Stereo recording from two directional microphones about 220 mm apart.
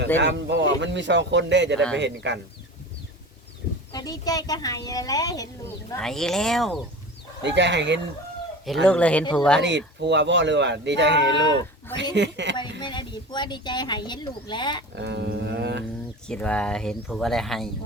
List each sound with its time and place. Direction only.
0.2 s speech: 55° right (ahead or behind)
3.9 s speech: 15° left (ahead or behind)
6.0 s speech: centre (ahead or behind)
7.4 s speech: 55° right (ahead or behind)
8.9 s speech: 5° left (ahead or behind)
9.6 s speech: 55° right (ahead or behind)
12.8 s speech: 20° left (ahead or behind)
14.9 s speech: 50° right (ahead or behind)
16.2 s speech: 5° left (ahead or behind)